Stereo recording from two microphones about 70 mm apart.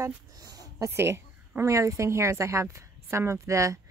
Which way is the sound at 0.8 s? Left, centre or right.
Right.